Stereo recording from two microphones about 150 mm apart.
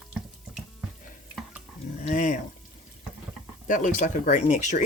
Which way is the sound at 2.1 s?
60° left (ahead or behind).